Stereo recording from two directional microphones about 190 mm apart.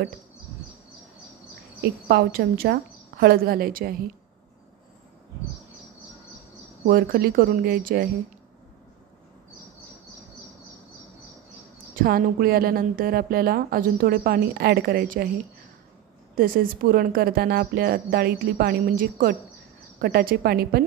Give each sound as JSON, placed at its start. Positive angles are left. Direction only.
{"t": 1.8, "sound": "a woman's voice", "side_deg": -55}
{"t": 6.9, "sound": "a woman's voice", "side_deg": -50}
{"t": 11.9, "sound": "a woman's voice", "side_deg": -50}
{"t": 16.3, "sound": "a woman's voice", "side_deg": -50}